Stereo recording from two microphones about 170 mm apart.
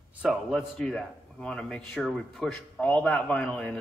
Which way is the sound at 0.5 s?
5° left (ahead or behind).